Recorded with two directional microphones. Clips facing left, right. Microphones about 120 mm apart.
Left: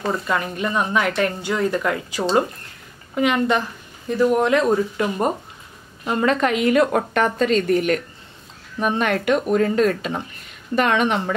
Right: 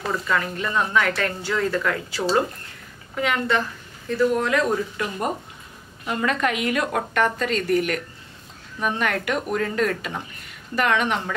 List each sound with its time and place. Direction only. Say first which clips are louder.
0.1 s a woman's voice: right 1 dB; 20° left (ahead or behind)